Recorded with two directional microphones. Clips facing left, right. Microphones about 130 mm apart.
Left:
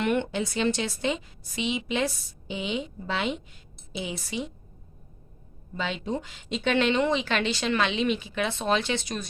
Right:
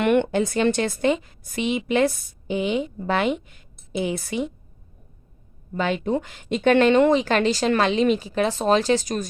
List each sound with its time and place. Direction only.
0.0 s a woman's voice: 60° right (ahead or behind)
5.7 s a woman's voice: 50° right (ahead or behind)